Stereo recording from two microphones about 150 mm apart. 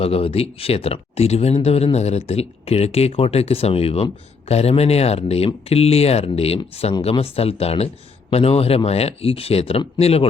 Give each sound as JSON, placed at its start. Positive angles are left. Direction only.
{"t": 0.0, "sound": "speech", "side_deg": 40}